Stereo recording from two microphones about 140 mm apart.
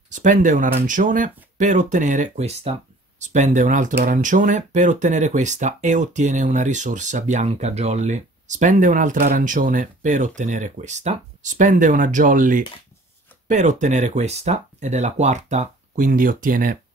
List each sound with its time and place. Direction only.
0.1 s speech: 65° right (ahead or behind)
13.5 s speech: 60° right (ahead or behind)